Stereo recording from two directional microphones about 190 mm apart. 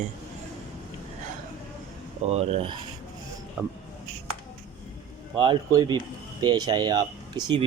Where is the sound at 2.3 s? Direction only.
30° right (ahead or behind).